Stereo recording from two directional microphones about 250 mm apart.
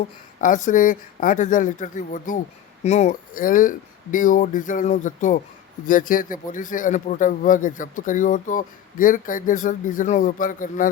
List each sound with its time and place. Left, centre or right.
0.4 s a man's voice: left